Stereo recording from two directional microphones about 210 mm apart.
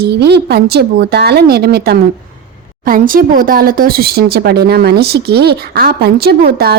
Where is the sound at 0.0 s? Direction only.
50° right (ahead or behind).